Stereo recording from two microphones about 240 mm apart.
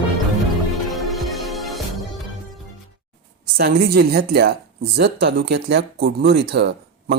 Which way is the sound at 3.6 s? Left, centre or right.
Right.